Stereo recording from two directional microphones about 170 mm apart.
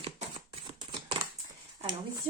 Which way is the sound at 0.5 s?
30° right (ahead or behind).